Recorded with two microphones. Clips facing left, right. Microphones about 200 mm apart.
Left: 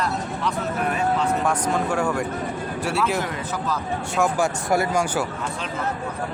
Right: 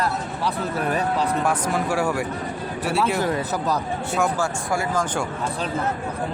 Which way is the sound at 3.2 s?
40° right (ahead or behind).